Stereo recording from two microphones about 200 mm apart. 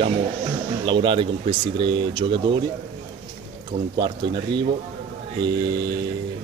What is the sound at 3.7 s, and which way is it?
Speech, 25° right (ahead or behind).